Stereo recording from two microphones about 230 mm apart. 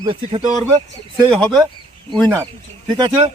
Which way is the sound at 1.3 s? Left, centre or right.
Centre.